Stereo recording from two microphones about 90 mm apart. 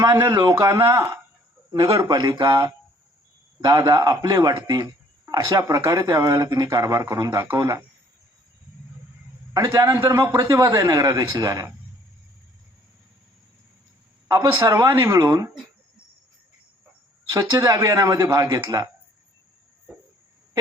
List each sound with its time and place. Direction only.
0.3 s a man's voice: 45° right (ahead or behind)
2.4 s speech: 55° right (ahead or behind)
3.8 s a man's voice: 45° right (ahead or behind)
5.2 s speech: 30° right (ahead or behind)
9.5 s speech: 30° right (ahead or behind)
14.4 s speech: 35° right (ahead or behind)
17.2 s speech: 30° right (ahead or behind)